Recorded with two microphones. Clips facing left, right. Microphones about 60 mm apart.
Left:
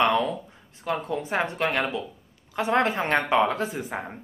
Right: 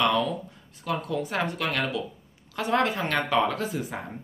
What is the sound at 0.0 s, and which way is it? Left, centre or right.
Speech, left.